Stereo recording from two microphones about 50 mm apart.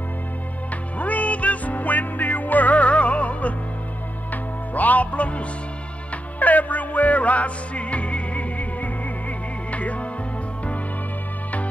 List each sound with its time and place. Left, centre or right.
0.9 s music: left